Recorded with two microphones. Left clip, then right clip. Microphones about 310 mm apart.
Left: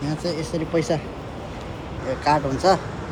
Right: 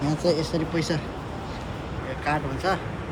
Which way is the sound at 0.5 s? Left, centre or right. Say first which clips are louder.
Left 4 dB; centre.